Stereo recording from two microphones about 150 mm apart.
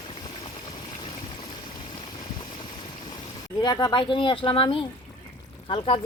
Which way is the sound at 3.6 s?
30° left (ahead or behind).